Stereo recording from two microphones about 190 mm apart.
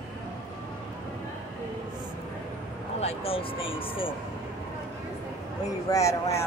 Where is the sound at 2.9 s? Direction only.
30° left (ahead or behind).